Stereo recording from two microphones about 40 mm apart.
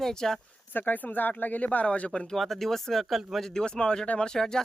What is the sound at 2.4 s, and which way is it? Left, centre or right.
Speech, centre.